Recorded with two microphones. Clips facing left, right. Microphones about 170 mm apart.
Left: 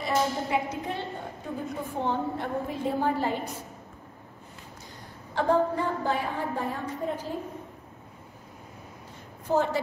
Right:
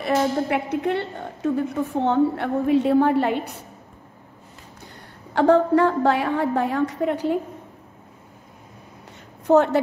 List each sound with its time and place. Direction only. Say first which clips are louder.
0.0 s a woman's voice: right 6 dB; 65° right (ahead or behind)
5.3 s a woman's voice: right 8 dB; 75° right (ahead or behind)
9.5 s a woman's voice: right 9 dB; 70° right (ahead or behind)